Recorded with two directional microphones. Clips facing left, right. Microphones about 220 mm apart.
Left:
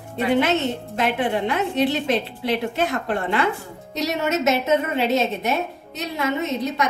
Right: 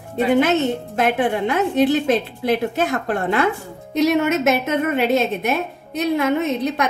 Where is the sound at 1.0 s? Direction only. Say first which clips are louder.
Right 3 dB; 45° right (ahead or behind).